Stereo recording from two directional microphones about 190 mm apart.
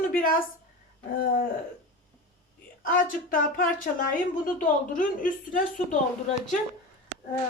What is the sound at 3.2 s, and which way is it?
A woman's voice, 45° left (ahead or behind).